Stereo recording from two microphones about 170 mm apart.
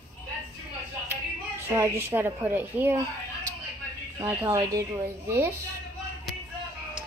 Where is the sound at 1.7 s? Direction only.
15° right (ahead or behind).